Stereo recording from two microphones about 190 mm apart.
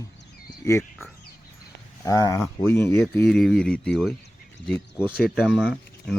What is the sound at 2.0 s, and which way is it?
Speech, 20° left (ahead or behind).